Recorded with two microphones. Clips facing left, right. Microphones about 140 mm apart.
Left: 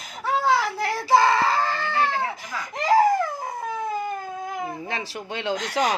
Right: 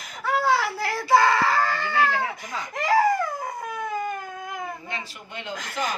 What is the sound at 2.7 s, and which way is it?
Crying, 25° left (ahead or behind).